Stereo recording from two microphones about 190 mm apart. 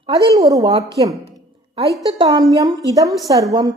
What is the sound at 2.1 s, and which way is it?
A woman's voice, 20° right (ahead or behind).